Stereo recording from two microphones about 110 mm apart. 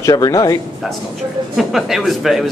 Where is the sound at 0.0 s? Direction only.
30° left (ahead or behind).